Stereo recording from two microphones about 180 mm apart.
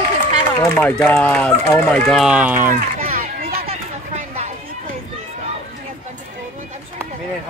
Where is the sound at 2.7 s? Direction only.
50° right (ahead or behind).